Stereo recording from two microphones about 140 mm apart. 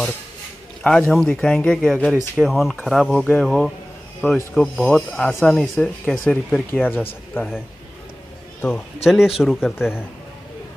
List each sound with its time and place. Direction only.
0.8 s speech: 5° left (ahead or behind)
8.5 s speech: 10° left (ahead or behind)
9.0 s speech: 5° right (ahead or behind)